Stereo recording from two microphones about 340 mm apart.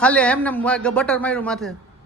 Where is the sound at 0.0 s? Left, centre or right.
Centre.